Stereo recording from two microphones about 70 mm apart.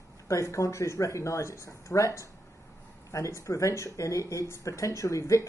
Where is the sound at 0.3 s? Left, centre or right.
Left.